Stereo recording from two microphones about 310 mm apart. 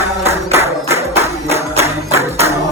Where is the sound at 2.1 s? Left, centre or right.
Centre.